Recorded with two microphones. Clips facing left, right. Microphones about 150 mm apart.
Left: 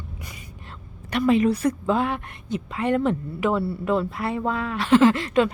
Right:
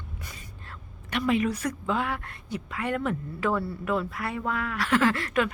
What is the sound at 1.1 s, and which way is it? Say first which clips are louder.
A woman's voice: left 6 dB; 35° left (ahead or behind).